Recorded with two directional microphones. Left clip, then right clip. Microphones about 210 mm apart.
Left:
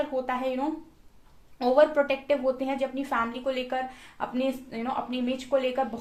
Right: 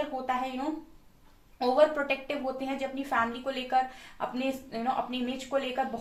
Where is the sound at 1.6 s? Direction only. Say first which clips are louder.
Left 3 dB; 40° left (ahead or behind).